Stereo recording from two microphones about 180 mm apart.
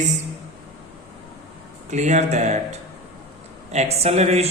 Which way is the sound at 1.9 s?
40° right (ahead or behind).